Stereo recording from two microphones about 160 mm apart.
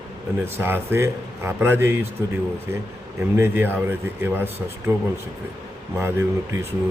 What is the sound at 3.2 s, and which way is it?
Speech, 15° right (ahead or behind).